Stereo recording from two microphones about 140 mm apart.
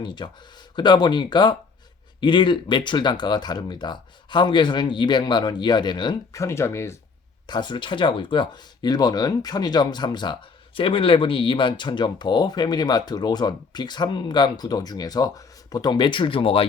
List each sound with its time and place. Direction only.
0.0 s speech: 35° left (ahead or behind)
7.4 s speech: 30° left (ahead or behind)